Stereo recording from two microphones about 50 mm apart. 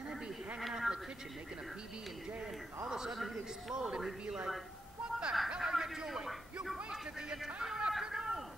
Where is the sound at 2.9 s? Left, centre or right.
Centre.